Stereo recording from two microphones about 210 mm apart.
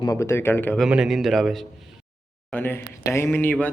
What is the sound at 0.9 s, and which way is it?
A man's voice, 5° right (ahead or behind).